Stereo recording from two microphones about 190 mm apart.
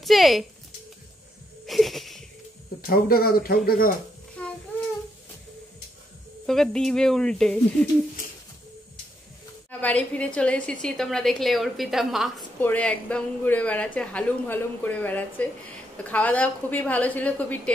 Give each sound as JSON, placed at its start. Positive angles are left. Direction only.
{"t": 0.0, "sound": "speech", "side_deg": 0}
{"t": 1.7, "sound": "wheeze", "side_deg": 0}
{"t": 2.9, "sound": "speech", "side_deg": 50}
{"t": 4.4, "sound": "child singing", "side_deg": 5}
{"t": 6.4, "sound": "a woman's voice", "side_deg": 0}
{"t": 9.7, "sound": "a woman's voice", "side_deg": 10}
{"t": 12.5, "sound": "a woman's voice", "side_deg": 10}